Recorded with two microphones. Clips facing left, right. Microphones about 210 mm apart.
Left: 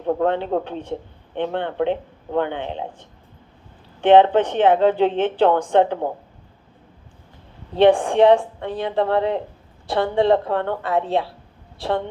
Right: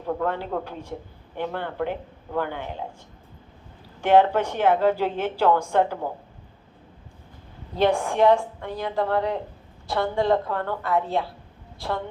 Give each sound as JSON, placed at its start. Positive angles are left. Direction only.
{"t": 0.0, "sound": "a woman's voice", "side_deg": 30}
{"t": 4.0, "sound": "a woman's voice", "side_deg": 30}
{"t": 7.8, "sound": "a woman's voice", "side_deg": 30}